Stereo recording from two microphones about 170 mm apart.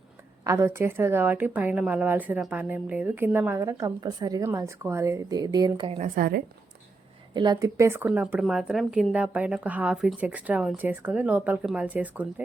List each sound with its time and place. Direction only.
0.4 s a woman's voice: 15° right (ahead or behind)
6.0 s a woman's voice: 60° right (ahead or behind)
7.3 s a woman's voice: 25° right (ahead or behind); by 12.3 s 10° right (ahead or behind)